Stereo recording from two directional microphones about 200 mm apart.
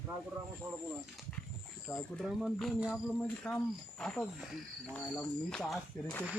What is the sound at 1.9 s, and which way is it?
Speech, centre (ahead or behind).